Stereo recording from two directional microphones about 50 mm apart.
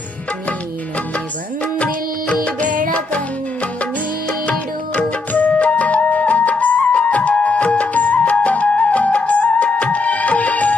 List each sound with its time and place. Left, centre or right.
1.6 s music: left
4.9 s music: left